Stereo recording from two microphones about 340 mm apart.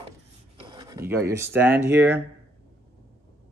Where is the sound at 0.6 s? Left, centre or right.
Centre.